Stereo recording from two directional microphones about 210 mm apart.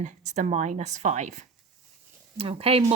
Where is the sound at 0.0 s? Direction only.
35° right (ahead or behind).